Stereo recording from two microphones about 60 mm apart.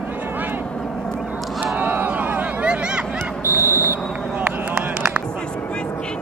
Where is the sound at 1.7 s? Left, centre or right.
Right.